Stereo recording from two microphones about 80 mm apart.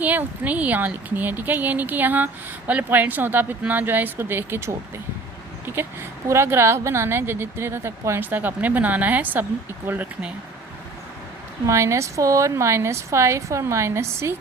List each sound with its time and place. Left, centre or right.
0.0 s speech: right
11.6 s a woman's voice: right